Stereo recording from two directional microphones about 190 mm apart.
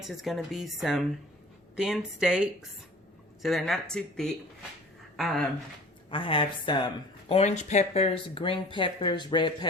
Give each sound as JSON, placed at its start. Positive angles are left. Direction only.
{"t": 0.0, "sound": "a woman's voice", "side_deg": 0}
{"t": 6.1, "sound": "speech", "side_deg": 25}